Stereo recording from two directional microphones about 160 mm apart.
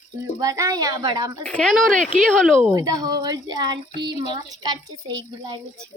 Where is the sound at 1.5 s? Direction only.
5° left (ahead or behind).